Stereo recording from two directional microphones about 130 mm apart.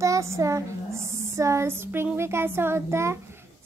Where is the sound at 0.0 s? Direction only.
25° right (ahead or behind).